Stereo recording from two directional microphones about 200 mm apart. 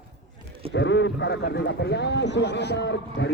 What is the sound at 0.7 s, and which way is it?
Speech, 60° left (ahead or behind).